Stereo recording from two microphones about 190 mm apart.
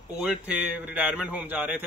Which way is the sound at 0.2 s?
5° right (ahead or behind).